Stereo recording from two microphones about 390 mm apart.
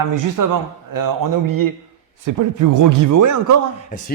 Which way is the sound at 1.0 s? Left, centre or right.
Right.